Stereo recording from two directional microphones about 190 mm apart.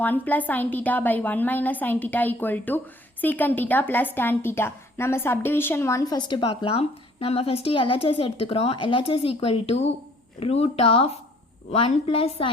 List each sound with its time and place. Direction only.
0.0 s a woman's voice: 10° left (ahead or behind); by 12.5 s 30° left (ahead or behind)